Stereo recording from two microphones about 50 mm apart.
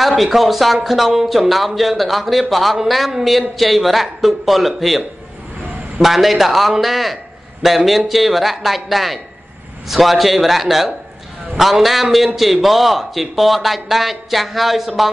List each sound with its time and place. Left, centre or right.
0.0 s speech: centre